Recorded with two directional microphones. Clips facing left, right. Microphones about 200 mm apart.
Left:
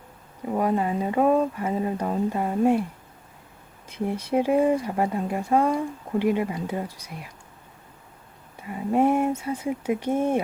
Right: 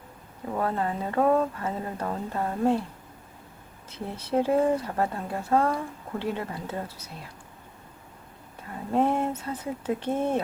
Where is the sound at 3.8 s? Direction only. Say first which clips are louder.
Left 7 dB; 15° left (ahead or behind).